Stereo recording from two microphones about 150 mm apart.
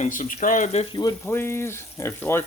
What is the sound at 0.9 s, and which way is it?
Speech, 25° left (ahead or behind).